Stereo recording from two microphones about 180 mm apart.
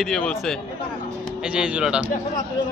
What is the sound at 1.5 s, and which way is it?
Speech, 5° right (ahead or behind).